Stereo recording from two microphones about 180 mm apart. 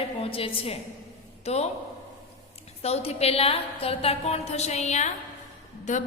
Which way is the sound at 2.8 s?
35° left (ahead or behind).